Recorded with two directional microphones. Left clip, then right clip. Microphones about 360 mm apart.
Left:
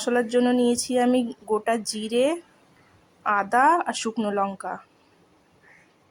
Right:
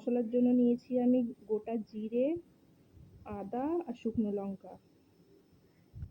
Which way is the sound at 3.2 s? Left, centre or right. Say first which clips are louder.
Left 18 dB; left.